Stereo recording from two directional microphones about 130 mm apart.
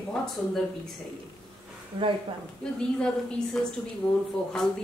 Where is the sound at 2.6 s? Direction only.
5° left (ahead or behind).